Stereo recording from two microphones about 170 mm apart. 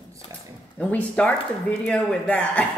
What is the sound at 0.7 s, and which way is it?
Speech, 5° left (ahead or behind).